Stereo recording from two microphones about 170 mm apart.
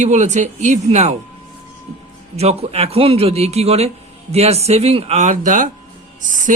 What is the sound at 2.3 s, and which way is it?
Speech, 35° right (ahead or behind).